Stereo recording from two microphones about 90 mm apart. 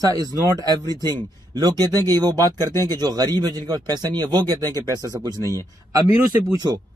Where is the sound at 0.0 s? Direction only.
45° right (ahead or behind).